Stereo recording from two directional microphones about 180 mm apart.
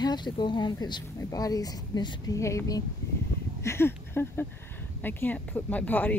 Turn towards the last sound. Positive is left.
turn(degrees=10)  # may be behind; listen again after turning